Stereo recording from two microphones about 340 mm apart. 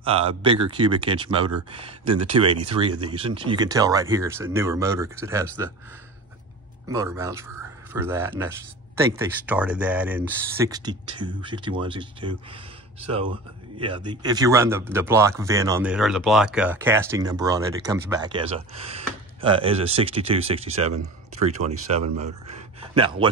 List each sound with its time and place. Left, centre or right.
0.0 s speech: centre
6.9 s speech: centre
13.7 s a man's voice: centre